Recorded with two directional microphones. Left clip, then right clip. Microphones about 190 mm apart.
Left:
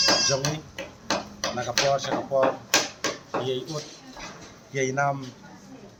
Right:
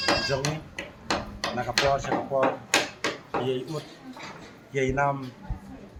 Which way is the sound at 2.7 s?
45° left (ahead or behind).